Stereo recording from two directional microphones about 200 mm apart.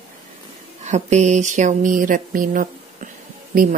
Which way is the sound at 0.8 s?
35° right (ahead or behind).